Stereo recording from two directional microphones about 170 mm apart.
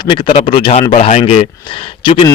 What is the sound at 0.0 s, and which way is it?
Speech, 30° left (ahead or behind).